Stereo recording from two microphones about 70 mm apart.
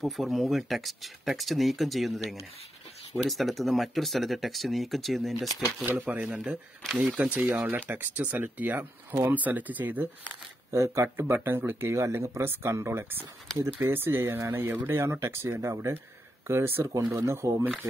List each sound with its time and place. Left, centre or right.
0.0 s speech: centre
5.9 s speech: right
10.7 s speech: right
16.4 s speech: right
17.1 s speech: right